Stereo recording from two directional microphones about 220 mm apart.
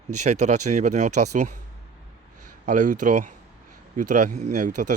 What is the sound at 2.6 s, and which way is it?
Speech, 35° right (ahead or behind).